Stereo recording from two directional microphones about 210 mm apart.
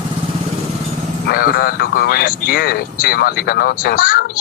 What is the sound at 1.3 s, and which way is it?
Speech, 45° left (ahead or behind).